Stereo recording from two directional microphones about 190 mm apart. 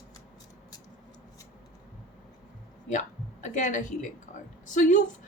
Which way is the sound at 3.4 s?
40° left (ahead or behind).